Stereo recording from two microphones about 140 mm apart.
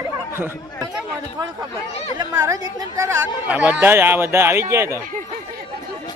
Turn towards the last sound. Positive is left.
turn(degrees=-20)  # may be behind; listen again after turning